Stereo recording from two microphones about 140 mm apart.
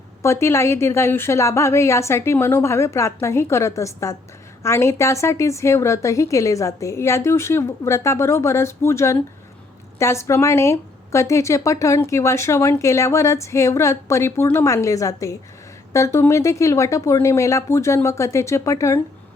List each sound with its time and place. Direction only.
0.2 s a woman's voice: 20° left (ahead or behind)